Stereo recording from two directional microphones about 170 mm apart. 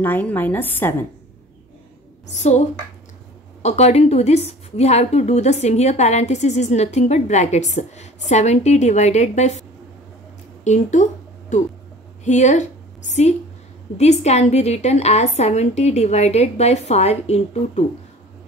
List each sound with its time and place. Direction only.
0.0 s a woman's voice: 10° left (ahead or behind)
2.2 s a woman's voice: 40° left (ahead or behind)
3.6 s a woman's voice: 40° left (ahead or behind)
10.6 s a woman's voice: 45° left (ahead or behind)
13.9 s a woman's voice: 40° left (ahead or behind)